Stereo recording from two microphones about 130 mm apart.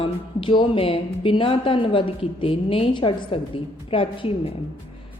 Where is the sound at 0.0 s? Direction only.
40° left (ahead or behind).